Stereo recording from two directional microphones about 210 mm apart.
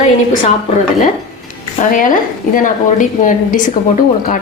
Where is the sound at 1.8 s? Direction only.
40° left (ahead or behind).